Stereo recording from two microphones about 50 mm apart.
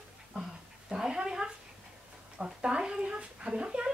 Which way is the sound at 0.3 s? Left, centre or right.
Centre.